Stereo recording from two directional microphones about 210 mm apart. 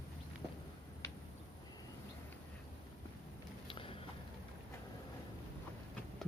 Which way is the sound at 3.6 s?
25° left (ahead or behind).